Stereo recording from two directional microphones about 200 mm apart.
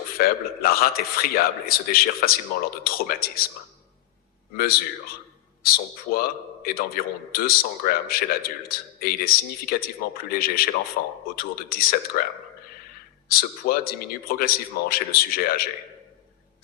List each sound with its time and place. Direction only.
0.2 s a man's voice: 50° left (ahead or behind)
4.5 s a man's voice: 50° left (ahead or behind)
13.2 s a man's voice: 45° left (ahead or behind)